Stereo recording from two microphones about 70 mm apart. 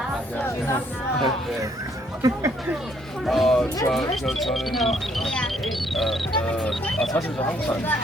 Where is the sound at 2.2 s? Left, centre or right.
Right.